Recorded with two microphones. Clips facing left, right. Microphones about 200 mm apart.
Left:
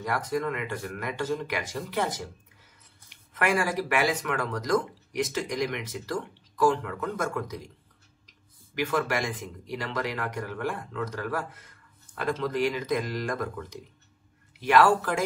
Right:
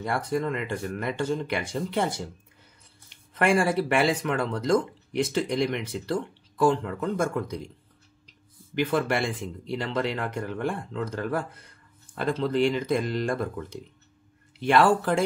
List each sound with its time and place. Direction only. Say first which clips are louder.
0.0 s speech: right 2 dB; 30° right (ahead or behind)
8.7 s speech: right 3 dB; 30° right (ahead or behind)